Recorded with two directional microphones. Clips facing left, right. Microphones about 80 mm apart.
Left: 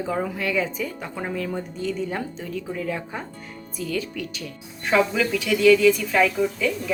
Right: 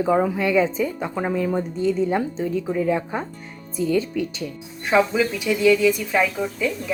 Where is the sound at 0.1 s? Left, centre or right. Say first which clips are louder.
Right 6 dB; right.